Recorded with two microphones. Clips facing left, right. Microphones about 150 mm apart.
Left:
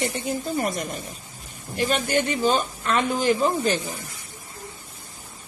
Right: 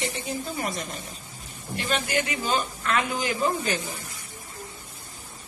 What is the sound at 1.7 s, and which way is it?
Speech, 45° left (ahead or behind).